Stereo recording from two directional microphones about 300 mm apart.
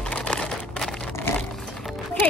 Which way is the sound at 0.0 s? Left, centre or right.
Centre.